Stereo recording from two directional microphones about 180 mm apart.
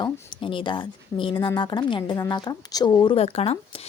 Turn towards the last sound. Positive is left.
turn(degrees=35)  # may be behind; listen again after turning